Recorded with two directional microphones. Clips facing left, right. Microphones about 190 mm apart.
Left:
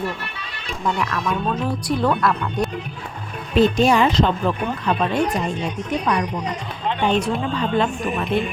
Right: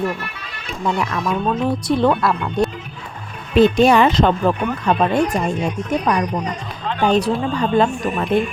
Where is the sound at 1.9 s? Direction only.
25° right (ahead or behind).